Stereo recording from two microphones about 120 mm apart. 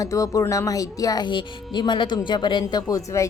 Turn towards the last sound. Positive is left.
turn(degrees=25)  # may be behind; listen again after turning